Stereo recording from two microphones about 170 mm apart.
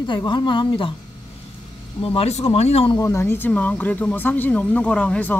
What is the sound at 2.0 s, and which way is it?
Speech, 35° left (ahead or behind).